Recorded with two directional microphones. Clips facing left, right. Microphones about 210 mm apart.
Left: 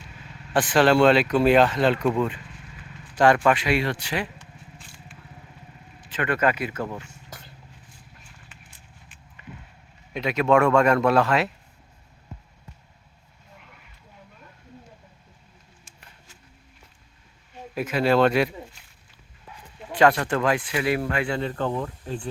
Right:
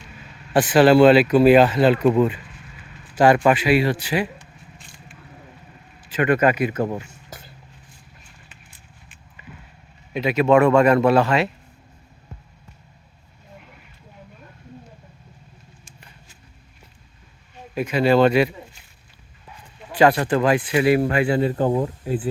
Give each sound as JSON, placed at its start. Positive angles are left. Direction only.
{"t": 0.5, "sound": "speech", "side_deg": -5}
{"t": 6.1, "sound": "speech", "side_deg": -15}
{"t": 7.0, "sound": "a sound", "side_deg": -5}
{"t": 10.1, "sound": "speech", "side_deg": -5}
{"t": 17.7, "sound": "speech", "side_deg": 0}
{"t": 19.9, "sound": "speech", "side_deg": -5}